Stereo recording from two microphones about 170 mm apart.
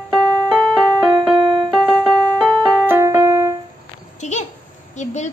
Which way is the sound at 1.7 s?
Centre (ahead or behind).